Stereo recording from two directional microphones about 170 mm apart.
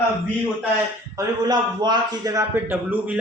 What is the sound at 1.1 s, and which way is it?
A man's voice, 25° right (ahead or behind).